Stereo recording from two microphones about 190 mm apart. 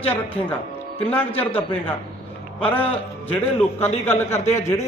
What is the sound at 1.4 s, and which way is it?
Speech, 30° left (ahead or behind).